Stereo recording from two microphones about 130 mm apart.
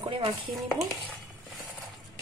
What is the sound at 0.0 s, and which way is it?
Speech, 35° right (ahead or behind).